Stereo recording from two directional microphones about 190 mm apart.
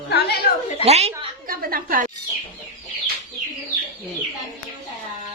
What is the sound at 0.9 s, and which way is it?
Speech, 35° right (ahead or behind).